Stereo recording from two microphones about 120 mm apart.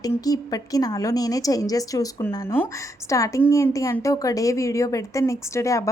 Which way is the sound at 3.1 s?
25° left (ahead or behind).